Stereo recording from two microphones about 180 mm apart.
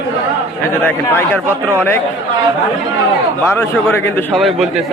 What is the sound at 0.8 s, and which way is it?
Speech, 10° left (ahead or behind).